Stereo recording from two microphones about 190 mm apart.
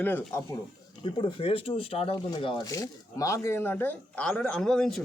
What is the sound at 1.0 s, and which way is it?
Speech, 25° left (ahead or behind).